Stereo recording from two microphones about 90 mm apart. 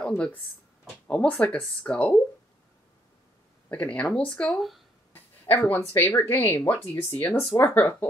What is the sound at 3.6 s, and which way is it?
Speech, 15° left (ahead or behind).